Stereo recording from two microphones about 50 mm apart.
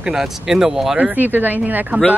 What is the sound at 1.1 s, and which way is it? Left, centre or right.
Speech, right.